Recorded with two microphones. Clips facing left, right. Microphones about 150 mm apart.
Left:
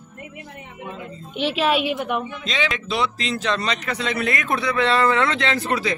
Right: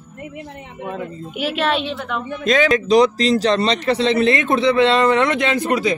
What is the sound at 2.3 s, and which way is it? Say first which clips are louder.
Speech: right 10 dB; 50° right (ahead or behind).